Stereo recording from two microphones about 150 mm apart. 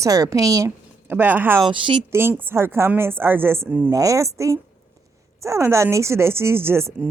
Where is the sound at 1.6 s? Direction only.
35° right (ahead or behind).